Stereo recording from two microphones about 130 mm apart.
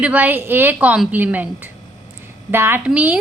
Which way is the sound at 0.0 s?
10° right (ahead or behind).